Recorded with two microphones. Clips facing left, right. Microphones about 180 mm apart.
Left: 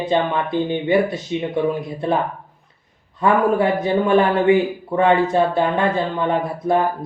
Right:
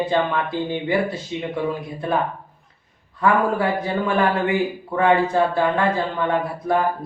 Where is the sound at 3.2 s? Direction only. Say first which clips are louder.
Left 3 dB; 20° left (ahead or behind).